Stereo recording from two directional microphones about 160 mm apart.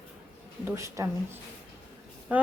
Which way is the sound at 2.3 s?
10° right (ahead or behind).